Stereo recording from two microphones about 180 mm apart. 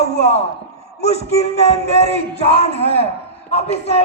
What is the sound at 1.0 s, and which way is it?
A man's voice, 35° left (ahead or behind).